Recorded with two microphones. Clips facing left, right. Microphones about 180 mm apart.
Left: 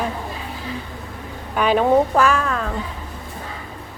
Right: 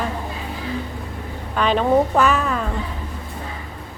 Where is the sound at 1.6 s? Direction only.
10° left (ahead or behind).